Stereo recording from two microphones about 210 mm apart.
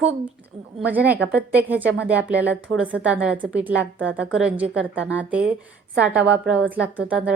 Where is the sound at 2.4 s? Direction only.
55° right (ahead or behind).